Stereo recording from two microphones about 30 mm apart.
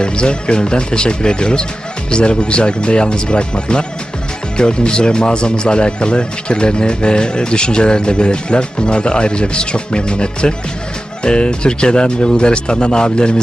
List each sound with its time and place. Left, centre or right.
0.0 s speech: left